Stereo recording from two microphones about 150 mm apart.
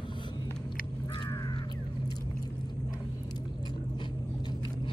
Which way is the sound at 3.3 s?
30° left (ahead or behind).